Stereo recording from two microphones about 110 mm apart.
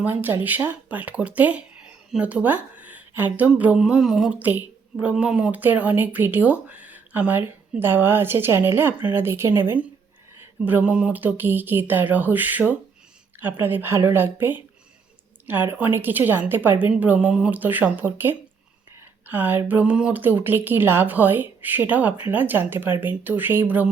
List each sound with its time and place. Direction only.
0.0 s a woman's voice: 15° right (ahead or behind)